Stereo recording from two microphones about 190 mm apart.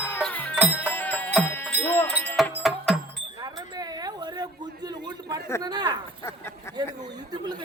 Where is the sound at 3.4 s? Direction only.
20° right (ahead or behind).